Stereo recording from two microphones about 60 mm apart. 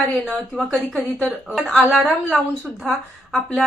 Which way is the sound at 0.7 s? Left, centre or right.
Centre.